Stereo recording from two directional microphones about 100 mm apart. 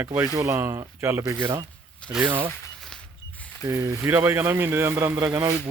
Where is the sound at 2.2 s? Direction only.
55° right (ahead or behind).